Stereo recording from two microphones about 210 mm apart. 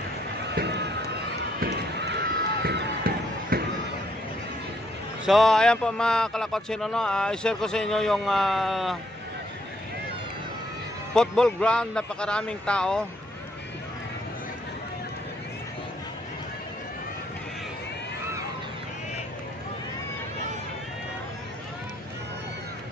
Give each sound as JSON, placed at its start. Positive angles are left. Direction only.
{"t": 0.5, "sound": "run", "side_deg": -55}
{"t": 1.6, "sound": "a sound", "side_deg": -55}
{"t": 5.2, "sound": "a man's voice", "side_deg": 0}
{"t": 11.1, "sound": "a man's voice", "side_deg": 5}